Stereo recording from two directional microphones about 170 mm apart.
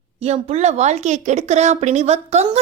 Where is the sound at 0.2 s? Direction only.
40° right (ahead or behind).